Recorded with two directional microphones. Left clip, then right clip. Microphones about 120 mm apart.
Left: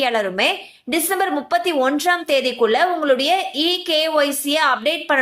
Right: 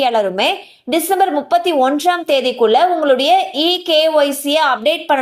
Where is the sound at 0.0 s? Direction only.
15° right (ahead or behind).